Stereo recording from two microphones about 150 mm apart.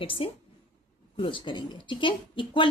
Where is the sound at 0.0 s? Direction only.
35° left (ahead or behind).